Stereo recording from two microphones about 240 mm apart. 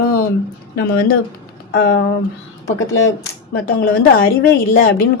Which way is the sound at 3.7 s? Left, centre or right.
Left.